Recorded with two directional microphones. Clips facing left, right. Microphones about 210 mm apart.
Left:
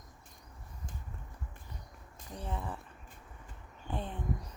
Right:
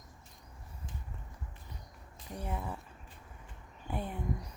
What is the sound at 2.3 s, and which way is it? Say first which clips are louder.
Speech: right 1 dB; 10° right (ahead or behind).